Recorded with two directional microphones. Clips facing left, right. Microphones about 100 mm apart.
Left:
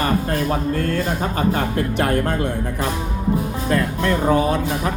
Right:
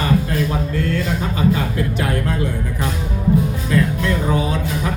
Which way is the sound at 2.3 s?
55° left (ahead or behind).